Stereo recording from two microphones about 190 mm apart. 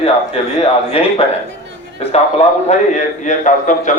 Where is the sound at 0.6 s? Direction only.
30° left (ahead or behind).